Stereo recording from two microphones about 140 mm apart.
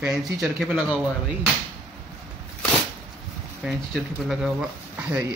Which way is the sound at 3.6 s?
Centre (ahead or behind).